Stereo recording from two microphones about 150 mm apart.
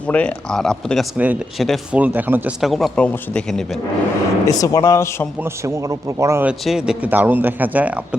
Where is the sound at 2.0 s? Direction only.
10° right (ahead or behind).